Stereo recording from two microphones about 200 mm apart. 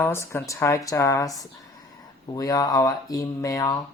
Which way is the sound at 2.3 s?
20° left (ahead or behind).